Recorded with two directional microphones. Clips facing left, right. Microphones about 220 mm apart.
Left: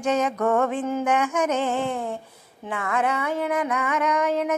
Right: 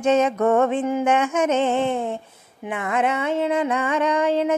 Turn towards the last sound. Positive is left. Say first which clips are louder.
# right 3 dB
turn(degrees=-30)  # may be behind; listen again after turning